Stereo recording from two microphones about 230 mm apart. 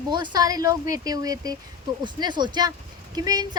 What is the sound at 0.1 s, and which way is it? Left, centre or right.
A woman's voice, centre.